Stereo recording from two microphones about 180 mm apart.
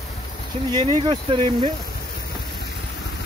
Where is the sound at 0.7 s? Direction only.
25° right (ahead or behind).